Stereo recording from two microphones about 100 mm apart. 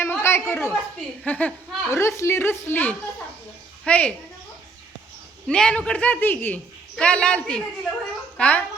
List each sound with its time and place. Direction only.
0.0 s a sound: 25° left (ahead or behind)
1.2 s a man's voice: 15° left (ahead or behind)
1.9 s a woman's voice: 30° left (ahead or behind); by 4.1 s 10° left (ahead or behind)
5.5 s a man's voice: 10° left (ahead or behind)